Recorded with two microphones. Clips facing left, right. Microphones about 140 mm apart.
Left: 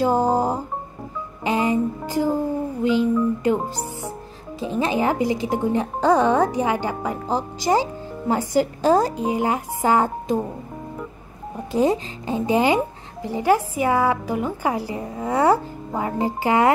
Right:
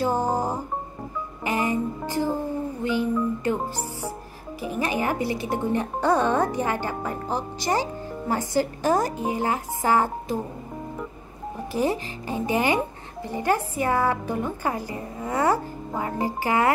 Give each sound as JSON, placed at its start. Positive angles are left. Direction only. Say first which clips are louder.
{"t": 0.0, "sound": "music", "louder": "left 5 dB", "side_deg": 15}
{"t": 2.8, "sound": "a child's voice", "louder": "left 6 dB", "side_deg": 20}
{"t": 11.7, "sound": "a child's voice", "louder": "left 5 dB", "side_deg": 20}